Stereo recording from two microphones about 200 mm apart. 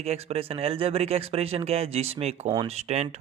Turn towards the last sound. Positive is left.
turn(degrees=-35)  # may be behind; listen again after turning